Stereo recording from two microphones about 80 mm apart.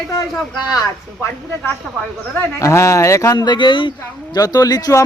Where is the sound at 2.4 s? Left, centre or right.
Left.